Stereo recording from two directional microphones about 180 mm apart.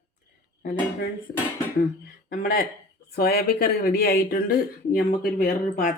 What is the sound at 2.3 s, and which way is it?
Speech, 50° left (ahead or behind).